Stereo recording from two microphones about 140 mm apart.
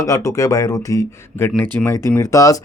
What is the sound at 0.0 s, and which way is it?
Speech, 20° left (ahead or behind).